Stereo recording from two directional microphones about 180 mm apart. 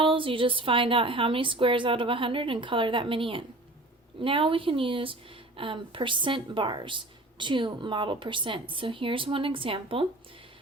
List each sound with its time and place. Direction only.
0.0 s speech: 30° right (ahead or behind)